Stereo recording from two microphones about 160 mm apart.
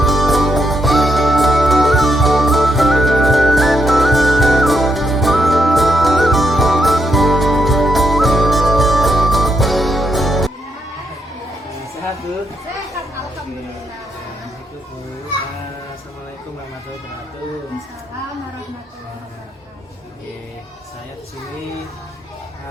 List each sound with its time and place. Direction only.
0.0 s music: centre (ahead or behind)
11.7 s music: 20° left (ahead or behind)